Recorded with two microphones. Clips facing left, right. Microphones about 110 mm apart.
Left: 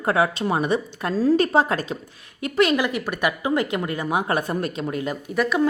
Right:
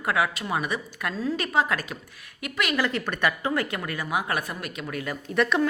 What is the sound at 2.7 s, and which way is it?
Speech, 15° left (ahead or behind).